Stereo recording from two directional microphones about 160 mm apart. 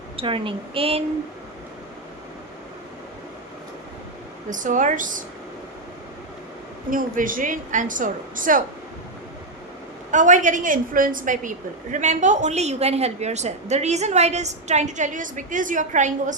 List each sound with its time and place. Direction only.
0.2 s a woman's voice: 35° right (ahead or behind)
4.4 s a woman's voice: 55° right (ahead or behind)
6.9 s a woman's voice: 55° right (ahead or behind)
10.1 s a woman's voice: 50° right (ahead or behind)